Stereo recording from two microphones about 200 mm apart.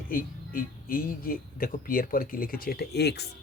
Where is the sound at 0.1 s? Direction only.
45° left (ahead or behind).